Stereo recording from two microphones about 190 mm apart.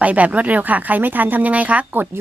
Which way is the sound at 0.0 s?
5° right (ahead or behind).